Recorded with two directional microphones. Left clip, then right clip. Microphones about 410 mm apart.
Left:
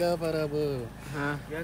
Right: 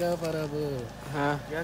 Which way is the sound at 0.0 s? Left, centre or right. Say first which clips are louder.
Left 2 dB; centre.